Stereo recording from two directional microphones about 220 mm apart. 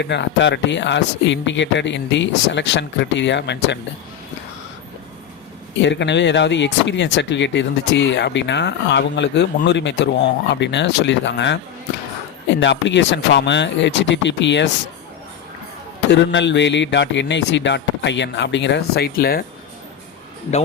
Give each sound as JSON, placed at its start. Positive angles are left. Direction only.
{"t": 0.0, "sound": "speech", "side_deg": 50}
{"t": 5.8, "sound": "speech", "side_deg": 55}
{"t": 16.0, "sound": "speech", "side_deg": 55}